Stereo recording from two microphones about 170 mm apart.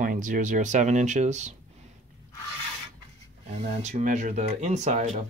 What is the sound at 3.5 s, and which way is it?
Speech, 40° right (ahead or behind).